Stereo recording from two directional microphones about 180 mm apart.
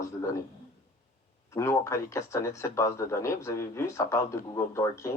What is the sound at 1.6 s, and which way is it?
A man's voice, 15° left (ahead or behind).